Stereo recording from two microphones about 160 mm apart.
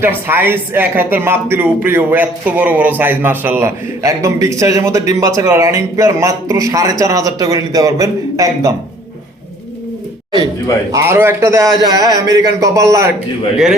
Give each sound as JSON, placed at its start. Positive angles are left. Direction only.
{"t": 0.0, "sound": "a man's voice", "side_deg": -15}
{"t": 10.9, "sound": "a man's voice", "side_deg": -15}